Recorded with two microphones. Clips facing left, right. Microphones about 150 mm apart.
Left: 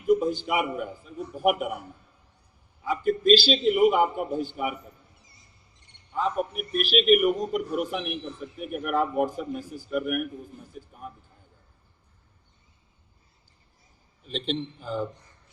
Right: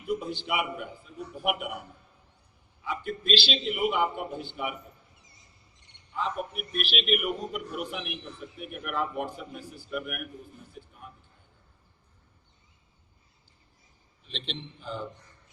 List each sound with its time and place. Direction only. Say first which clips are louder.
0.1 s a man's voice: left 8 dB; 40° left (ahead or behind)
2.8 s a man's voice: left 10 dB; 40° left (ahead or behind)
6.1 s a man's voice: left 5 dB; 40° left (ahead or behind)
14.3 s a man's voice: left 9 dB; 45° left (ahead or behind)